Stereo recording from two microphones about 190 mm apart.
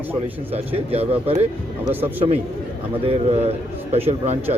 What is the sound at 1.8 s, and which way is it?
Speech, 10° right (ahead or behind).